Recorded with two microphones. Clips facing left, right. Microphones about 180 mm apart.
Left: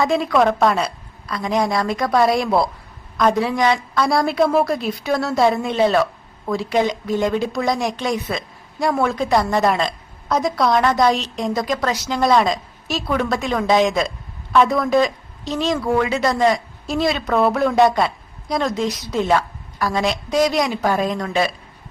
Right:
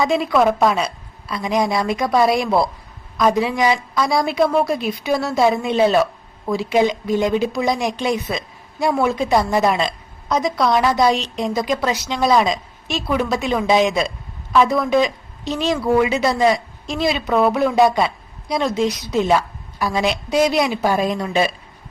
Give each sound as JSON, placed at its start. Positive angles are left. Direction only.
{"t": 0.0, "sound": "a woman's voice", "side_deg": 0}
{"t": 7.2, "sound": "speech", "side_deg": -15}
{"t": 7.4, "sound": "a woman's voice", "side_deg": 0}
{"t": 8.3, "sound": "speech", "side_deg": -15}
{"t": 8.8, "sound": "a woman's voice", "side_deg": -5}
{"t": 16.8, "sound": "a woman's voice", "side_deg": 5}